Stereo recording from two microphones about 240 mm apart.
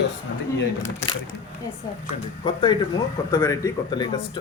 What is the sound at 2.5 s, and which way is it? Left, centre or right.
Speech, left.